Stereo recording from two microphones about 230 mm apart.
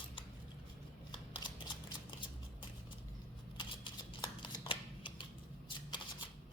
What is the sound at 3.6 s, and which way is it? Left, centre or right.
Shuffling cards, centre.